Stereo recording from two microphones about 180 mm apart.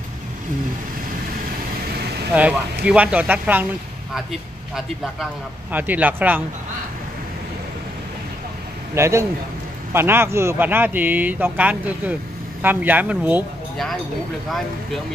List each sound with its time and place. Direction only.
2.3 s a man's voice: 5° right (ahead or behind)
8.9 s a man's voice: 15° right (ahead or behind)